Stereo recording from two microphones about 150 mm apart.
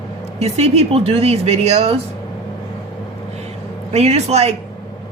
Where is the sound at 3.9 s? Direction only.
45° right (ahead or behind).